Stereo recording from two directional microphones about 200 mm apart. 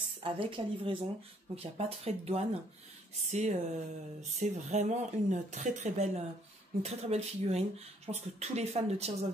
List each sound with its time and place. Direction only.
0.2 s a woman's voice: 25° right (ahead or behind)